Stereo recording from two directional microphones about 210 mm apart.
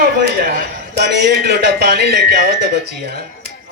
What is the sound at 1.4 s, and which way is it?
Speech, 50° right (ahead or behind).